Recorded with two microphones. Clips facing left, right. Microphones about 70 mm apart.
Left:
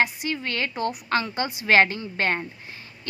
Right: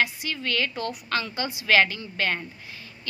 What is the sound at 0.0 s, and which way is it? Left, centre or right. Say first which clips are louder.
A woman's voice: left 2 dB; left.